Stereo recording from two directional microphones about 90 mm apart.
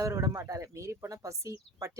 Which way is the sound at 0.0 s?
40° right (ahead or behind).